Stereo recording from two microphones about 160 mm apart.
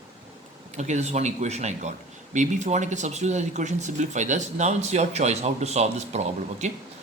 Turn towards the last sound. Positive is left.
turn(degrees=-45)  # may be behind; listen again after turning